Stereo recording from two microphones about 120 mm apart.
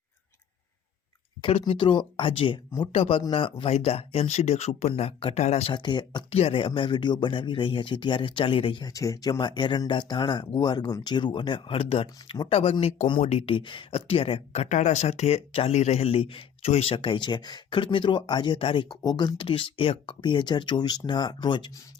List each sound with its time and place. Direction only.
1.6 s speech: 45° left (ahead or behind); by 5.7 s 65° left (ahead or behind)
5.7 s speech: 40° left (ahead or behind)
6.3 s speech: 55° left (ahead or behind)
8.9 s speech: 30° left (ahead or behind); by 12.7 s 55° left (ahead or behind)
13.2 s speech: 65° left (ahead or behind)
13.5 s speech: 45° left (ahead or behind)
18.9 s speech: 35° left (ahead or behind)